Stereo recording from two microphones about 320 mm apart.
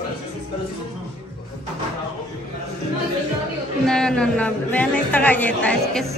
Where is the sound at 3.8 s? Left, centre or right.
Centre.